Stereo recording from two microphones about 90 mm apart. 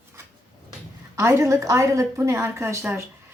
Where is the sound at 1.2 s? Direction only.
35° right (ahead or behind).